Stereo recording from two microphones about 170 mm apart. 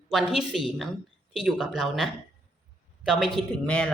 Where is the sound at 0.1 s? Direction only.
Centre (ahead or behind).